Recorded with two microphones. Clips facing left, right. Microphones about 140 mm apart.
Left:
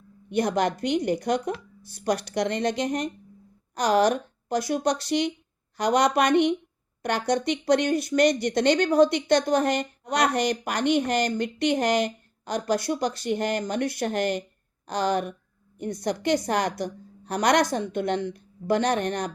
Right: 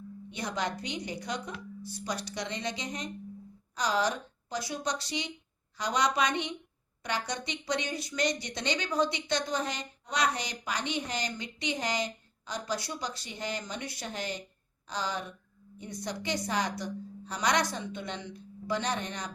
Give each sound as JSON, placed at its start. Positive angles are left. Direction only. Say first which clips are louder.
{"t": 0.3, "sound": "speech", "louder": "left 11 dB", "side_deg": 60}